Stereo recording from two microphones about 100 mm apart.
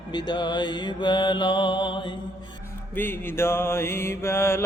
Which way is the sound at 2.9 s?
25° left (ahead or behind).